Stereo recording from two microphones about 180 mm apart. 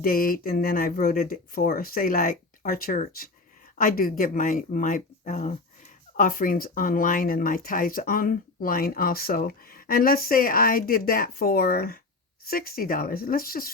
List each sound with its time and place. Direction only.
0.0 s speech: 50° left (ahead or behind)